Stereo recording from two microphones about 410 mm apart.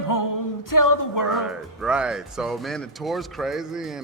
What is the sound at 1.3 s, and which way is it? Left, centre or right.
Speech, centre.